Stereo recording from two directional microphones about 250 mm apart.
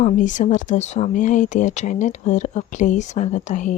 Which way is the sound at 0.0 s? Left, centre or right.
Left.